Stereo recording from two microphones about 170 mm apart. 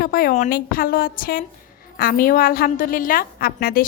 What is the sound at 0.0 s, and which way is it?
A woman's voice, 55° left (ahead or behind).